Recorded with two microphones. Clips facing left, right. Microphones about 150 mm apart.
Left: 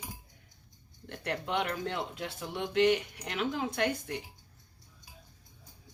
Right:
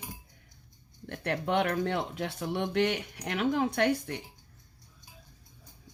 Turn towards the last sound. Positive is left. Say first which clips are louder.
# right 4 dB
turn(degrees=-60)  # may be behind; listen again after turning